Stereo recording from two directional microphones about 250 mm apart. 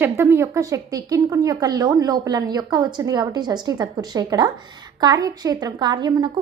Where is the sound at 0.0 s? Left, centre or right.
Centre.